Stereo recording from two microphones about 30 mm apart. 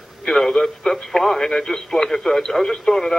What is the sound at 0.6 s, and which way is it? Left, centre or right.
Speech, centre.